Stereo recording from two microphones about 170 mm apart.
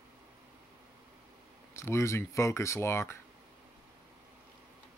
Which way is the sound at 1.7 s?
15° left (ahead or behind).